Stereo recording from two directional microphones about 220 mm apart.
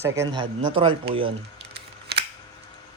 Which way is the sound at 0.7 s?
25° right (ahead or behind).